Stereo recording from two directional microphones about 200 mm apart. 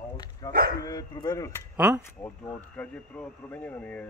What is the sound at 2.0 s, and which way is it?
Speech, 10° left (ahead or behind).